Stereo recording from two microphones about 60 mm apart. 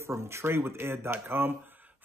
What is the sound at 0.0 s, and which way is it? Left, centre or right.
Speech, right.